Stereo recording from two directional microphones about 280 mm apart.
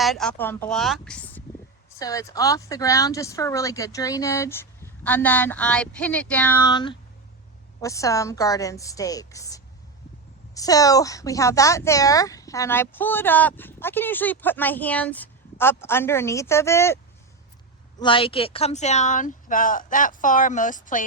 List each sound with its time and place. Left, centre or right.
0.0 s speech: centre
18.0 s speech: centre